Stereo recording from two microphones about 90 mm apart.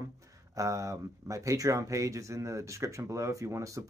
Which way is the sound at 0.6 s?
35° right (ahead or behind).